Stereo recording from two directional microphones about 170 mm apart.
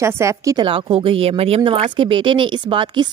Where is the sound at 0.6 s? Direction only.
30° right (ahead or behind).